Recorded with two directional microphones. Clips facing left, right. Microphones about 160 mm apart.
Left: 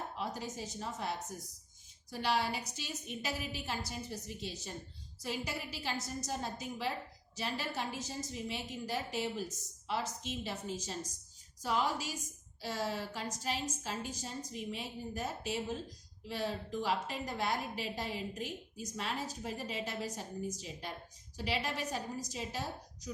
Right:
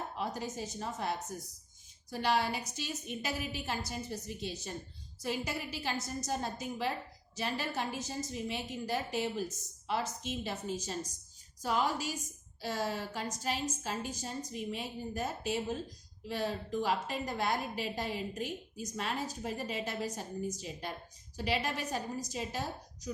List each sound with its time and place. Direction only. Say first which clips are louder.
0.2 s a woman's voice: right 3 dB; 50° right (ahead or behind)